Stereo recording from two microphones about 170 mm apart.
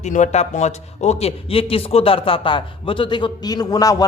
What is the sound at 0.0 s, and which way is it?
Speech, 45° left (ahead or behind).